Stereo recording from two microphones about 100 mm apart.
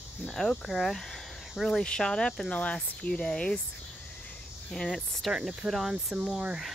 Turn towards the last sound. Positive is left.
turn(degrees=-5)  # may be behind; listen again after turning